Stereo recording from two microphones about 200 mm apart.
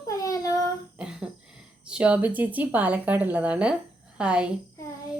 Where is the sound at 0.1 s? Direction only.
15° left (ahead or behind).